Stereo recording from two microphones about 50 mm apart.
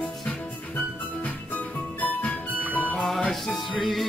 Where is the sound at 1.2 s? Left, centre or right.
Left.